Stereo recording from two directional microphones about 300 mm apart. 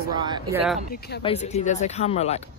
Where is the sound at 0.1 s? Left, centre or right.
Centre.